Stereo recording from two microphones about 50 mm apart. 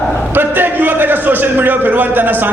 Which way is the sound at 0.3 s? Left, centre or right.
Right.